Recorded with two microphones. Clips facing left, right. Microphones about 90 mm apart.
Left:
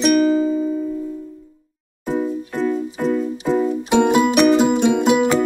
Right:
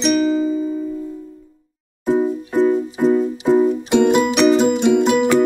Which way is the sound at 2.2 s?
20° right (ahead or behind).